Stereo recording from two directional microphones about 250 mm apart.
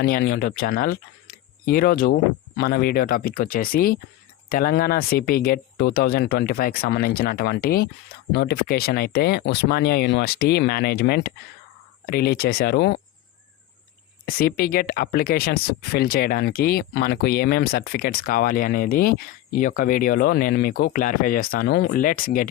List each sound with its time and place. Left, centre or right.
0.0 s speech: left
14.3 s speech: left